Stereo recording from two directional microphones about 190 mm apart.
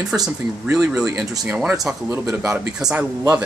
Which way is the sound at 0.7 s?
5° right (ahead or behind).